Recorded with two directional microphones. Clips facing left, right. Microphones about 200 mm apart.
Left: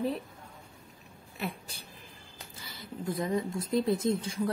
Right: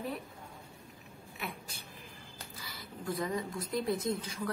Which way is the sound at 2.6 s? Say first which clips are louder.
Left 5 dB; 25° left (ahead or behind).